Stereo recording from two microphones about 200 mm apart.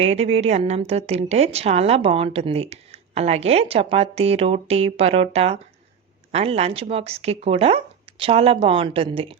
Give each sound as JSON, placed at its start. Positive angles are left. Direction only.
{"t": 0.0, "sound": "a woman's voice", "side_deg": -30}